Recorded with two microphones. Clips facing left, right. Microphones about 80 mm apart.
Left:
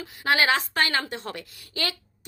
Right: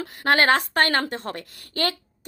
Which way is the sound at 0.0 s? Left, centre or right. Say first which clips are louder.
Right 3 dB; right.